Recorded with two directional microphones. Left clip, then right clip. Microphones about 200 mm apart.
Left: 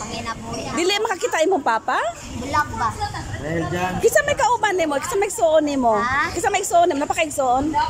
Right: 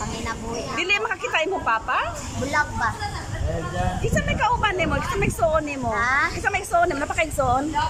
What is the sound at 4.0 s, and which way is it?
A woman's voice, 30° left (ahead or behind).